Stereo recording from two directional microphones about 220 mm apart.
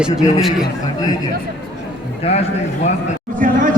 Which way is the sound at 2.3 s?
25° left (ahead or behind).